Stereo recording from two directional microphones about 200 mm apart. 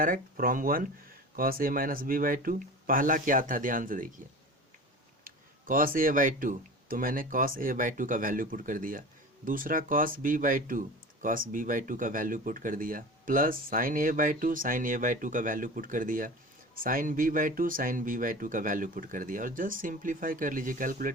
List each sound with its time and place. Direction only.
0.0 s speech: 45° right (ahead or behind)
5.2 s speech: 45° right (ahead or behind)